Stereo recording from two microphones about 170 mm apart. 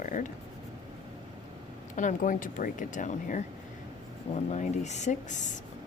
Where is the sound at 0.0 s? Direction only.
50° left (ahead or behind).